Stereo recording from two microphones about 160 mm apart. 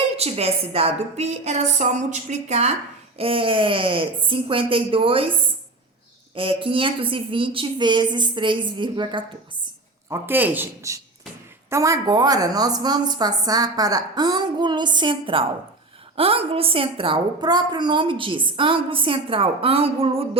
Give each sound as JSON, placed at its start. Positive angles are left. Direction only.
{"t": 0.2, "sound": "a woman's voice", "side_deg": -40}
{"t": 6.3, "sound": "a woman's voice", "side_deg": -35}
{"t": 10.1, "sound": "a man's voice", "side_deg": -10}